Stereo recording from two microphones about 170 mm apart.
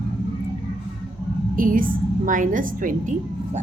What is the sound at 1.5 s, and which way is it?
A woman's voice, 55° right (ahead or behind).